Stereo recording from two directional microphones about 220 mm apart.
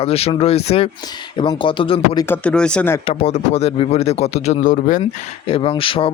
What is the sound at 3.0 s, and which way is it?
Speech, 30° left (ahead or behind).